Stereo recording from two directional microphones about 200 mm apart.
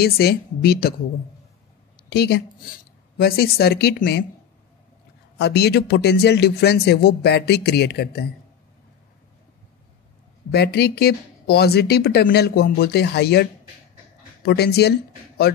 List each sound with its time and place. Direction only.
0.0 s speech: 55° left (ahead or behind)
2.0 s a woman's voice: 55° left (ahead or behind)
5.4 s speech: 55° left (ahead or behind)
10.5 s speech: 55° left (ahead or behind)